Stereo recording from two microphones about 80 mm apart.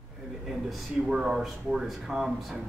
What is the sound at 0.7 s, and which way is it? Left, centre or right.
Speech, centre.